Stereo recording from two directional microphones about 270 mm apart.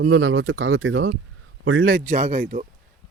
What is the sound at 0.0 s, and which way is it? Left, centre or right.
A man's voice, right.